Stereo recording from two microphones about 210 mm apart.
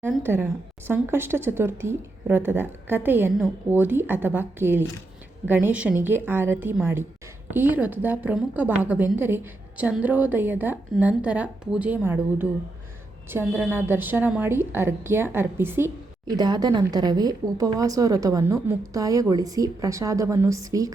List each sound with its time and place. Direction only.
0.0 s a woman's voice: 10° right (ahead or behind)
13.5 s a woman's voice: 10° right (ahead or behind)